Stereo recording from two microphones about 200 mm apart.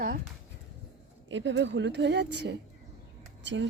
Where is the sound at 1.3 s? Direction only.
70° right (ahead or behind).